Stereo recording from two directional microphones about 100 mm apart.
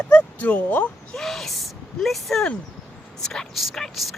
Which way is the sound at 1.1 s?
Centre (ahead or behind).